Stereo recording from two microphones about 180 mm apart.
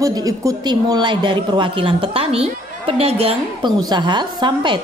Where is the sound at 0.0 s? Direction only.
20° right (ahead or behind).